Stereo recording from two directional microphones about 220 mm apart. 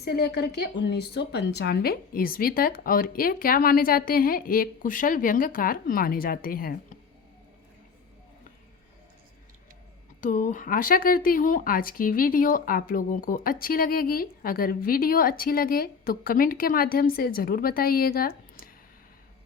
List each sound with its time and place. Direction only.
0.0 s a woman's voice: 45° left (ahead or behind)
10.2 s speech: 35° left (ahead or behind)